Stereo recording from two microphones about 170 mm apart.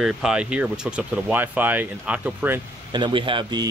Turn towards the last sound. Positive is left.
turn(degrees=-25)  # may be behind; listen again after turning